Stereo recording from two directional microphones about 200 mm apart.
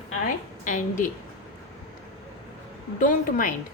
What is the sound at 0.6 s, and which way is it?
Speech, 40° left (ahead or behind).